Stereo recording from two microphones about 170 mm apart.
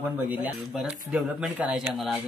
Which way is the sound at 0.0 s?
10° right (ahead or behind).